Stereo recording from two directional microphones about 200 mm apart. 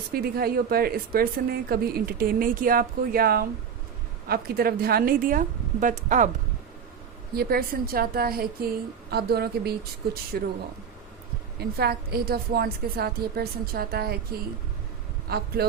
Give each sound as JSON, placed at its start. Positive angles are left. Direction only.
{"t": 0.1, "sound": "a woman's voice", "side_deg": -50}
{"t": 7.3, "sound": "a woman's voice", "side_deg": -50}
{"t": 11.6, "sound": "a woman's voice", "side_deg": -50}
{"t": 15.3, "sound": "a woman's voice", "side_deg": -50}